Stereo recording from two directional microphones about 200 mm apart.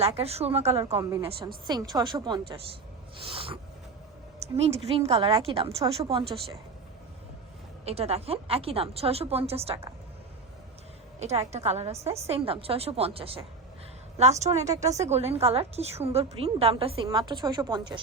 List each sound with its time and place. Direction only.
0.0 s a woman's voice: 30° right (ahead or behind)
1.6 s a woman's voice: 20° right (ahead or behind)
3.2 s a sound: 25° right (ahead or behind)
4.9 s a woman's voice: 30° right (ahead or behind)
7.9 s a woman's voice: 30° right (ahead or behind)
11.2 s a woman's voice: 35° right (ahead or behind)